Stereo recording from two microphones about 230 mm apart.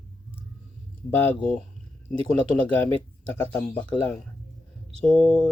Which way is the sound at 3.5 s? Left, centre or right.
Centre.